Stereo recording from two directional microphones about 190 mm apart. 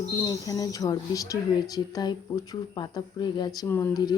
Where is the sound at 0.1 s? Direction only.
20° left (ahead or behind).